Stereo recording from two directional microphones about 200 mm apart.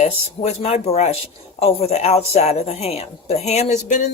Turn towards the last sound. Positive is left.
turn(degrees=35)  # may be behind; listen again after turning